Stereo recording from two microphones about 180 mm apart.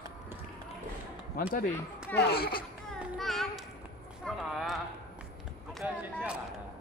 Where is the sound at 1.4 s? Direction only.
55° left (ahead or behind).